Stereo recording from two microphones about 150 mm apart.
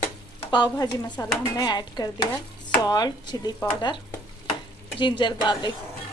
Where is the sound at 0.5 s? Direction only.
25° left (ahead or behind).